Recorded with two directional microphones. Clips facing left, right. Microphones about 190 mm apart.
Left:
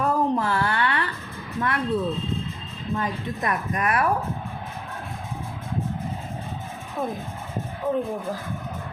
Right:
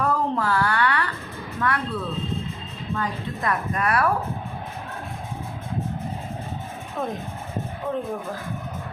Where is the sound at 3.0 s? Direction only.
20° left (ahead or behind).